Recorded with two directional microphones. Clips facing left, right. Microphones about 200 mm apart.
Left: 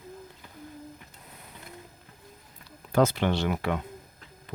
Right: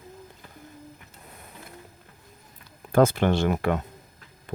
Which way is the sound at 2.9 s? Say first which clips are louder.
Right 4 dB; 50° right (ahead or behind).